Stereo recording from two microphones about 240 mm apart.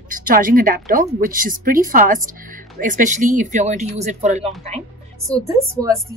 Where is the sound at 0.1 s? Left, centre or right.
Right.